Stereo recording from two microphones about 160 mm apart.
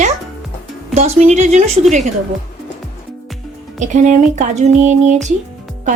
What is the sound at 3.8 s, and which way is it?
Speech, 50° right (ahead or behind).